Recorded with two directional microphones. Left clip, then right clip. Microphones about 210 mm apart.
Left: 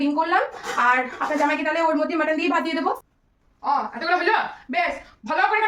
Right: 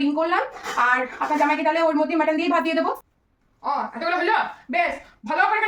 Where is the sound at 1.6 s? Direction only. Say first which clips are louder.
Right 1 dB; 15° left (ahead or behind).